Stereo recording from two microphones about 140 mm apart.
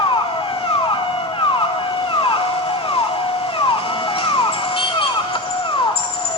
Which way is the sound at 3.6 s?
40° left (ahead or behind).